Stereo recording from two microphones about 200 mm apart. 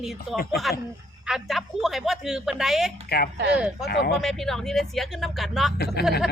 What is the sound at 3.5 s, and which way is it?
Speech, 5° right (ahead or behind).